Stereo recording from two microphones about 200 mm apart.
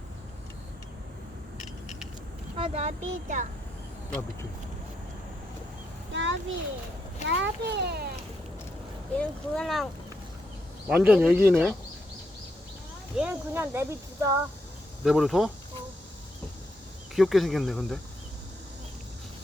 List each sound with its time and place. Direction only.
2.6 s speech: 30° right (ahead or behind)
6.1 s a sound: 70° right (ahead or behind)
7.3 s speech: 60° right (ahead or behind)
9.1 s speech: 5° left (ahead or behind)
13.1 s speech: 10° right (ahead or behind)
15.0 s speech: centre (ahead or behind)
17.2 s speech: centre (ahead or behind)